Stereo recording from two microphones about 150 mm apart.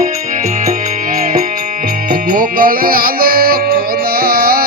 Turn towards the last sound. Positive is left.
turn(degrees=-90)